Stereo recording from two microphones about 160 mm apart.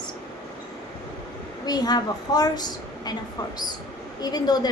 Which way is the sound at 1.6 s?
25° left (ahead or behind).